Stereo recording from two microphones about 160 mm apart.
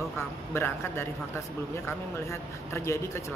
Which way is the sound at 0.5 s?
15° left (ahead or behind).